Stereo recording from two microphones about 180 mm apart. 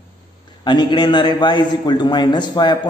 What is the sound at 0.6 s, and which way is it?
A man's voice, 25° left (ahead or behind).